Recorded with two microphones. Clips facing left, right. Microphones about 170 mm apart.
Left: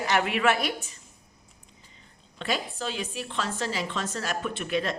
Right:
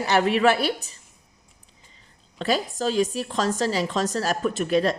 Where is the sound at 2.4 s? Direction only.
35° right (ahead or behind).